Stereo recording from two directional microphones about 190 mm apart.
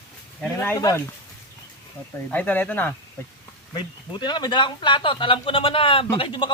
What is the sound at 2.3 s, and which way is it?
Speech, 10° left (ahead or behind).